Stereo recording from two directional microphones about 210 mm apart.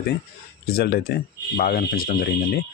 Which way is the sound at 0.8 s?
50° left (ahead or behind).